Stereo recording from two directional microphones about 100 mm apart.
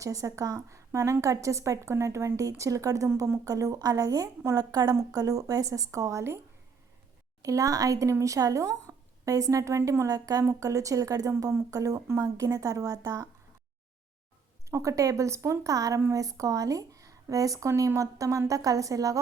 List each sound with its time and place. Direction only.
0.0 s a woman's voice: 35° right (ahead or behind)
7.4 s a woman's voice: 35° right (ahead or behind)
10.1 s a woman's voice: 40° right (ahead or behind)
14.7 s a woman's voice: 30° right (ahead or behind)